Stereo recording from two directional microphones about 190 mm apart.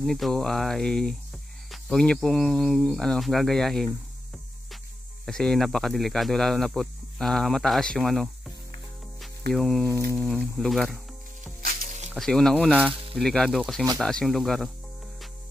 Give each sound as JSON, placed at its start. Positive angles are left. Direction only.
{"t": 0.0, "sound": "speech", "side_deg": 0}
{"t": 5.2, "sound": "speech", "side_deg": 5}
{"t": 9.5, "sound": "speech", "side_deg": 0}
{"t": 11.6, "sound": "music", "side_deg": -45}
{"t": 12.1, "sound": "speech", "side_deg": 0}